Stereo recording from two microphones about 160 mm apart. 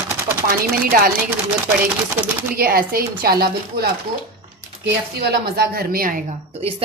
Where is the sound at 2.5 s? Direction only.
65° right (ahead or behind).